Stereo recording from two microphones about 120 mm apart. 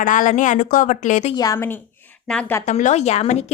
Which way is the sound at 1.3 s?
30° left (ahead or behind).